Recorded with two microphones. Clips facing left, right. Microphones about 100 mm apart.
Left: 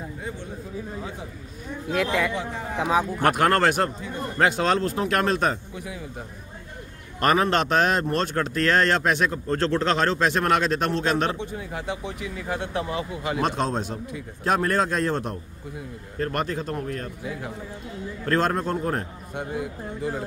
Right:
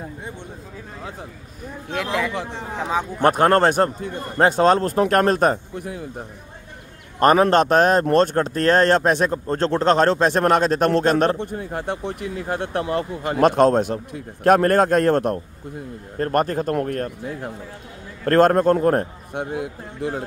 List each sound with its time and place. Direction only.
1.9 s speech: centre (ahead or behind)
3.2 s a man's voice: 30° right (ahead or behind); by 6.0 s 55° right (ahead or behind)
7.2 s a man's voice: 35° right (ahead or behind); by 15.4 s 55° right (ahead or behind)
16.2 s speech: 45° right (ahead or behind); by 20.2 s 60° right (ahead or behind)